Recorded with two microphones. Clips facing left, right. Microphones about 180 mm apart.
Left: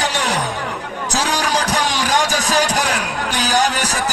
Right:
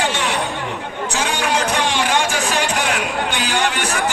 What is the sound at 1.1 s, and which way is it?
Music, 40° left (ahead or behind).